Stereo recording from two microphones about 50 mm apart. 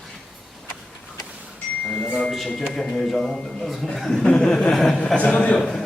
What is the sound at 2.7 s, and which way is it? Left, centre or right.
A man's voice, centre.